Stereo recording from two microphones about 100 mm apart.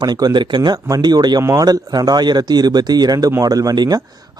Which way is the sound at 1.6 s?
40° right (ahead or behind).